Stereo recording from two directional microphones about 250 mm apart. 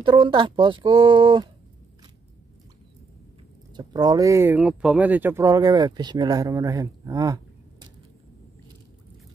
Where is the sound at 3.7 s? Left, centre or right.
Centre.